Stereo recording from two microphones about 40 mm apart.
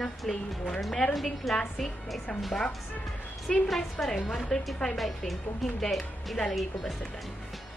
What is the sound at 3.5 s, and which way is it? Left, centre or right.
A woman's voice, centre.